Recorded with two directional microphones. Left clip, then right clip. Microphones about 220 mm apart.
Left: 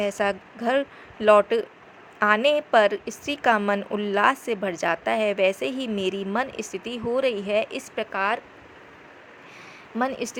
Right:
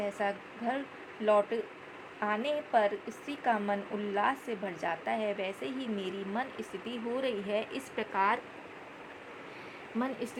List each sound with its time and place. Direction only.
0.0 s a woman's voice: 30° left (ahead or behind)